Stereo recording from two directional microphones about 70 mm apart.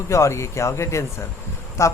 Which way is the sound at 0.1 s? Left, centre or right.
Left.